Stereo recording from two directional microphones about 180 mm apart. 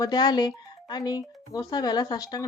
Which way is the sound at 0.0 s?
20° left (ahead or behind).